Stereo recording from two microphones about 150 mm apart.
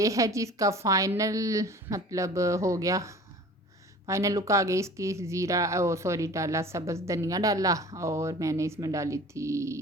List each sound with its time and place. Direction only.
0.0 s speech: 20° right (ahead or behind)